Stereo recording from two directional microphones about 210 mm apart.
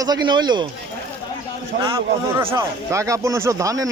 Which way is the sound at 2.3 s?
15° right (ahead or behind).